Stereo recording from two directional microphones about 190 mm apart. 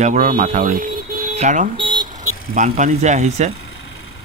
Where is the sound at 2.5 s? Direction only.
45° right (ahead or behind).